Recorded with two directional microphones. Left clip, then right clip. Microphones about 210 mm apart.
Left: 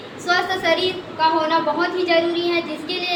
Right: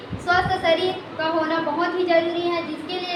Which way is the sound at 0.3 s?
15° right (ahead or behind).